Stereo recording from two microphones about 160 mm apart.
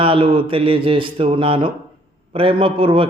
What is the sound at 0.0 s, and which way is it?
A man's voice, 35° right (ahead or behind).